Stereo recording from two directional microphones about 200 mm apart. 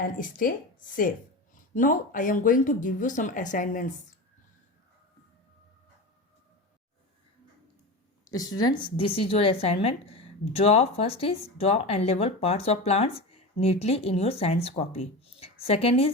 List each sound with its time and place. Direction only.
0.0 s speech: 45° left (ahead or behind)
1.7 s speech: 40° left (ahead or behind)
8.3 s speech: 20° left (ahead or behind)